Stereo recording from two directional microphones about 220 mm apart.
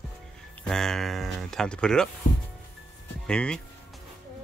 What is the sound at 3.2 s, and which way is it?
Speech, 5° left (ahead or behind).